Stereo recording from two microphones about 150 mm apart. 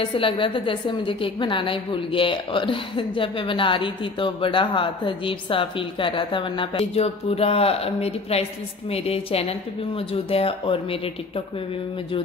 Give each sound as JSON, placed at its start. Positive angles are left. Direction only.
{"t": 0.0, "sound": "a woman's voice", "side_deg": 35}